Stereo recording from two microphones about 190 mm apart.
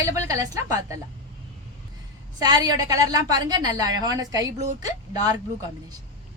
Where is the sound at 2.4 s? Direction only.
20° right (ahead or behind).